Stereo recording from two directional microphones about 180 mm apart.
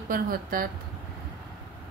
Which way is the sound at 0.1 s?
50° right (ahead or behind).